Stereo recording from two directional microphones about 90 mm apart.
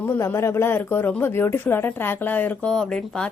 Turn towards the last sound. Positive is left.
turn(degrees=10)  # may be behind; listen again after turning